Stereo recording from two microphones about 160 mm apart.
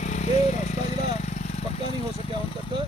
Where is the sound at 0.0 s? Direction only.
45° left (ahead or behind).